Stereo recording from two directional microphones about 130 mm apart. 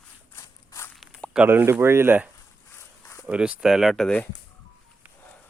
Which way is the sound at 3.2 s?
10° right (ahead or behind).